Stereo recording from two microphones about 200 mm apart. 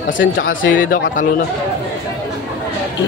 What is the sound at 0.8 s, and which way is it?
Speech, 45° left (ahead or behind).